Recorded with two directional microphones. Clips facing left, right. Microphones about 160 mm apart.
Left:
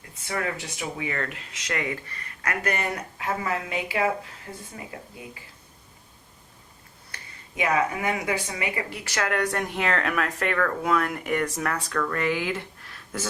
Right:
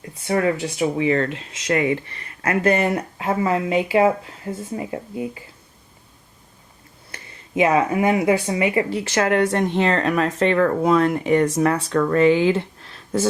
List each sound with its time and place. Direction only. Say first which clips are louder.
0.3 s speech: right 10 dB; 25° right (ahead or behind)
7.1 s speech: right 15 dB; 25° right (ahead or behind)